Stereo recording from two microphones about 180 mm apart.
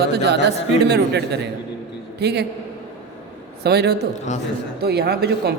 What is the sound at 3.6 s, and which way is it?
A woman's voice, 65° right (ahead or behind).